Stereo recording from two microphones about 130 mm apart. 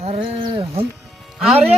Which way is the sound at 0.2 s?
40° right (ahead or behind).